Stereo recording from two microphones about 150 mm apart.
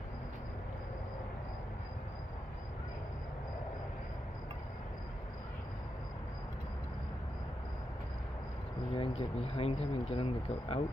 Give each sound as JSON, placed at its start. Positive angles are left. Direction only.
{"t": 8.9, "sound": "speech", "side_deg": 40}